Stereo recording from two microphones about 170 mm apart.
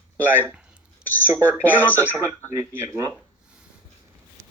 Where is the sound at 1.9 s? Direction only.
15° right (ahead or behind).